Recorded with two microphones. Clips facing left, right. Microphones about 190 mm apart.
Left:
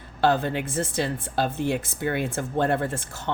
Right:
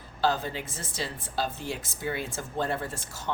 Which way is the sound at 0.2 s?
60° left (ahead or behind).